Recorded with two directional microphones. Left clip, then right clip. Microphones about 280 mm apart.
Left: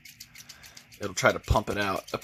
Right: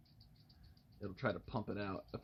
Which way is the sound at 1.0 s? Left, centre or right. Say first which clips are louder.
Left 17 dB; left.